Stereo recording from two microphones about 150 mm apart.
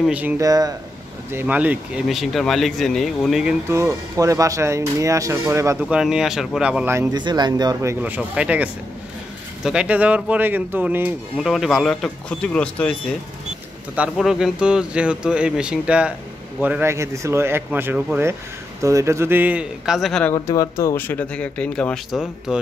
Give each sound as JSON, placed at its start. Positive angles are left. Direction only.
{"t": 0.0, "sound": "speech", "side_deg": -10}
{"t": 0.4, "sound": "speech", "side_deg": -25}
{"t": 1.3, "sound": "speech", "side_deg": -10}
{"t": 3.6, "sound": "speech", "side_deg": -20}
{"t": 5.8, "sound": "speech", "side_deg": -5}
{"t": 7.2, "sound": "speech", "side_deg": -30}
{"t": 13.9, "sound": "speech", "side_deg": -5}
{"t": 20.3, "sound": "speech", "side_deg": 20}